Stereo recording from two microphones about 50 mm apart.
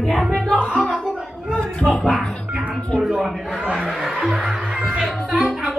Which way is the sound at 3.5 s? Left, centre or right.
Right.